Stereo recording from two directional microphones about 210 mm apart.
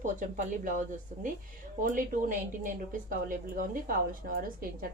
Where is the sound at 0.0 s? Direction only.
35° right (ahead or behind).